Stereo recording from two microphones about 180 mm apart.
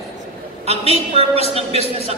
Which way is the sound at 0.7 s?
35° right (ahead or behind).